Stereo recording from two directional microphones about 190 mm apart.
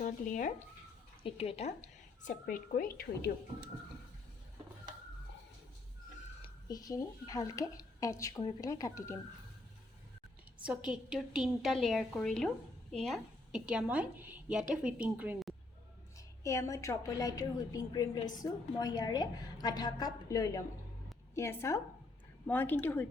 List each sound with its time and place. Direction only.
0.0 s speech: 40° left (ahead or behind)
1.2 s speech: 30° left (ahead or behind); by 3.2 s 50° left (ahead or behind)
6.4 s speech: 20° left (ahead or behind)
10.7 s a woman's voice: 5° right (ahead or behind)
16.1 s a woman's voice: 15° left (ahead or behind)